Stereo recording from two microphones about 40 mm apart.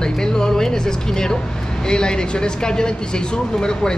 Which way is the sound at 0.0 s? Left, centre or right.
Centre.